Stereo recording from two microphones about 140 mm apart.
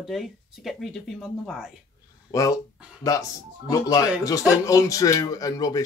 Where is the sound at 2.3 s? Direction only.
25° left (ahead or behind).